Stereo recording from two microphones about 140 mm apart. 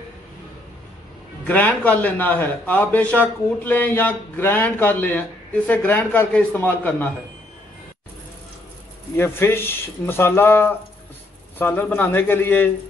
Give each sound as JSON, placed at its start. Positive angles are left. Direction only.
{"t": 1.5, "sound": "a man's voice", "side_deg": 10}
{"t": 9.1, "sound": "a man's voice", "side_deg": 15}